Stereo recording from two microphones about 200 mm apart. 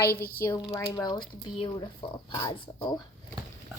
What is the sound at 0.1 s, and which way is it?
Speech, 50° left (ahead or behind).